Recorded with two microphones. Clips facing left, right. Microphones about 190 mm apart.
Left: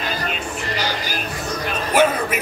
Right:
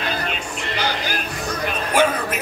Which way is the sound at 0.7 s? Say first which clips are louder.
Right 3 dB; 55° right (ahead or behind).